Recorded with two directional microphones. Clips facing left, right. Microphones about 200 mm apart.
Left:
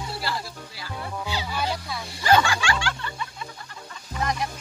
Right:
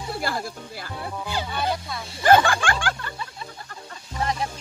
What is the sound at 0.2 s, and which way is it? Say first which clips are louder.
Speech: right 3 dB; 50° right (ahead or behind).